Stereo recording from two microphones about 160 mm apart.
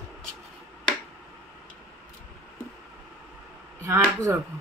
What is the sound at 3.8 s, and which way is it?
Speech, 15° right (ahead or behind).